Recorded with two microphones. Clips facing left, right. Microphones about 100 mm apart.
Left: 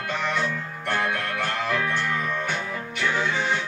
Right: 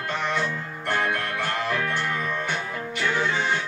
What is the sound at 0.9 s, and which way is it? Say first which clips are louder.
Music: even; 20° right (ahead or behind).